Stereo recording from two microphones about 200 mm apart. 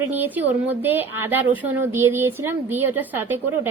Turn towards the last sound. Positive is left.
turn(degrees=-10)  # may be behind; listen again after turning